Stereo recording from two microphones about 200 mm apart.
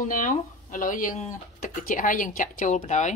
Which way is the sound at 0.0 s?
40° left (ahead or behind).